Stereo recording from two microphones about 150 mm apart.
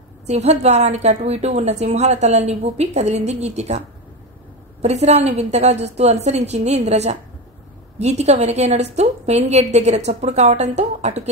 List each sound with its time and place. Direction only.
0.3 s a woman's voice: 45° right (ahead or behind)
4.8 s a woman's voice: 45° right (ahead or behind)